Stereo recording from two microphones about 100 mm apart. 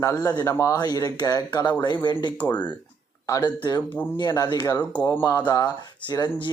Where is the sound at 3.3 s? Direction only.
40° left (ahead or behind).